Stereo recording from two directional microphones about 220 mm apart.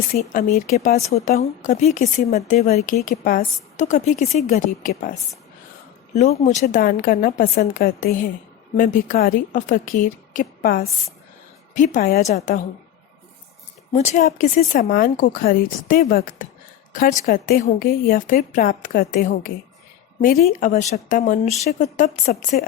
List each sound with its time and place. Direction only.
0.1 s speech: 35° left (ahead or behind)
6.1 s speech: 30° left (ahead or behind)
13.9 s speech: 30° left (ahead or behind)